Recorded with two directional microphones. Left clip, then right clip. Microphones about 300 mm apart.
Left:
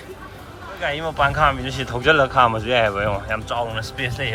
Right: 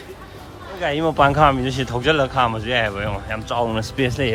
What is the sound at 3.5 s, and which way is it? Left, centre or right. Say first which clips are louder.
Speech: right 3 dB; right.